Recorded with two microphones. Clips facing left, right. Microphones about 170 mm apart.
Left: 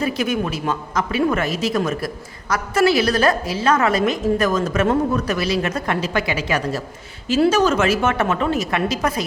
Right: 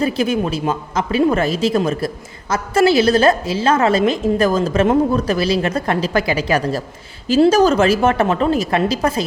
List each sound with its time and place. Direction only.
0.0 s a woman's voice: 30° right (ahead or behind)